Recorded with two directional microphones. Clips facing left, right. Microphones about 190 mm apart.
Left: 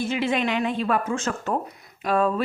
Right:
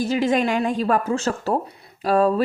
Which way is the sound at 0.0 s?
40° right (ahead or behind).